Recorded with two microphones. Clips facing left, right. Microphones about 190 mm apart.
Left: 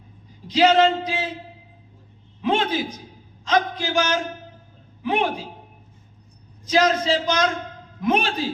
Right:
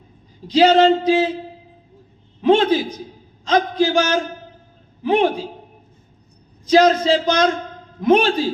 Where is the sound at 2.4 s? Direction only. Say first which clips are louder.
Right 7 dB; 35° right (ahead or behind).